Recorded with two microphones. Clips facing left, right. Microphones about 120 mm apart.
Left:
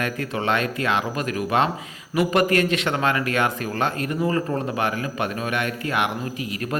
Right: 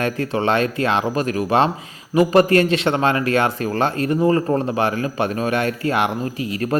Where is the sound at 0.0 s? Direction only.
30° right (ahead or behind).